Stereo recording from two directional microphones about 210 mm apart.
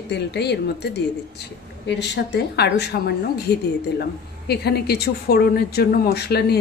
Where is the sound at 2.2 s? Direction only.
50° left (ahead or behind).